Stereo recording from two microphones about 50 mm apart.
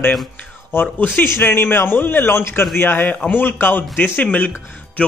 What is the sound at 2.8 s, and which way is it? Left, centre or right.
A man's voice, left.